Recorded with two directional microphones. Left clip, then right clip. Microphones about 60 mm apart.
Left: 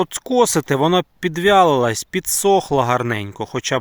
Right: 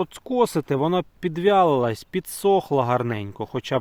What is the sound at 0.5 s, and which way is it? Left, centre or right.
Speech, left.